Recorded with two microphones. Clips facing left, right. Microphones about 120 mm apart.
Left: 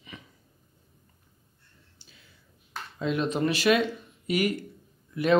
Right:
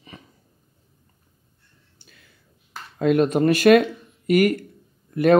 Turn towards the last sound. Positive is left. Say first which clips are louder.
# right 8 dB
turn(degrees=-55)  # may be behind; listen again after turning